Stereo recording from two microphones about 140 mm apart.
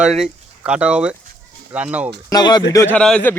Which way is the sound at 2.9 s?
5° left (ahead or behind).